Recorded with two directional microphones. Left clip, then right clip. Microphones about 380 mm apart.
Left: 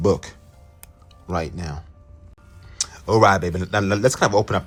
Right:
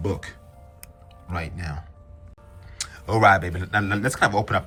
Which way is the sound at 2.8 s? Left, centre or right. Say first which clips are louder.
Left 3 dB; centre.